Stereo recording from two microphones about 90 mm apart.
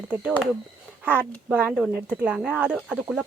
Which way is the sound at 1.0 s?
20° right (ahead or behind).